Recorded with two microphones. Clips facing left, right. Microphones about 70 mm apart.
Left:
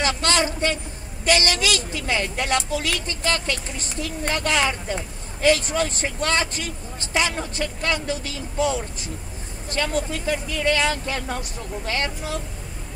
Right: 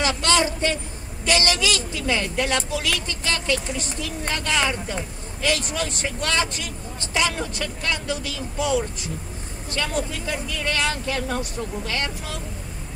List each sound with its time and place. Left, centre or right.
0.0 s vehicle: left
1.2 s speech: left